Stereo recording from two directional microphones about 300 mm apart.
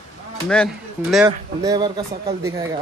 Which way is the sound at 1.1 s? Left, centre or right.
Centre.